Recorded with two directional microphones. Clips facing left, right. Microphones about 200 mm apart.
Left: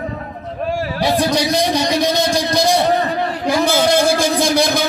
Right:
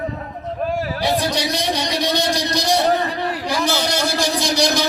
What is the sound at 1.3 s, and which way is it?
A man's voice, 45° left (ahead or behind).